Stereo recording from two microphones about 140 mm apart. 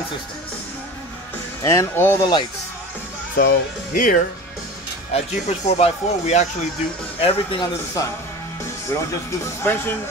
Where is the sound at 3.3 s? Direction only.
90° left.